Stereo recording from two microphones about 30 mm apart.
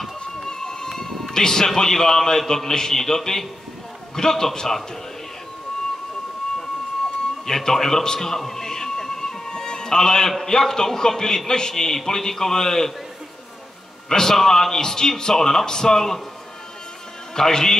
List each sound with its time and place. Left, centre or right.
0.5 s a sound: centre
1.3 s a man's voice: centre
7.4 s a sound: centre
9.6 s music: left
10.4 s a man's voice: centre
14.0 s a man's voice: centre
17.4 s a man's voice: centre